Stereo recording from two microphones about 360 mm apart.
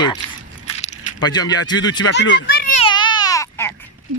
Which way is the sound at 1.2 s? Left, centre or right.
Centre.